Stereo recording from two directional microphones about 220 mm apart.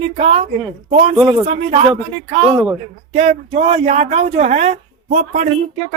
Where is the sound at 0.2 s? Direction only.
25° right (ahead or behind).